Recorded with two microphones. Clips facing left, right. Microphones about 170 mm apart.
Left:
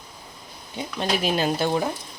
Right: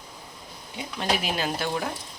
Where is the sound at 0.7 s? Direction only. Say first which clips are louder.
Left 2 dB; 25° left (ahead or behind).